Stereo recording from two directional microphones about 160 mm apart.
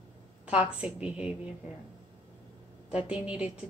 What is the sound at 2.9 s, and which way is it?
Speech, 5° right (ahead or behind).